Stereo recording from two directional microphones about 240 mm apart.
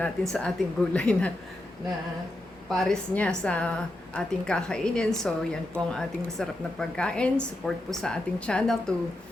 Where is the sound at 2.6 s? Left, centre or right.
Centre.